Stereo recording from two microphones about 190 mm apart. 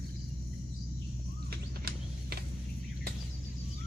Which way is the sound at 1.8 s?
55° right (ahead or behind).